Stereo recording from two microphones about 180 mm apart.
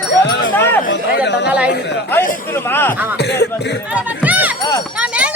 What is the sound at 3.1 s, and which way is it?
Speech, 65° left (ahead or behind).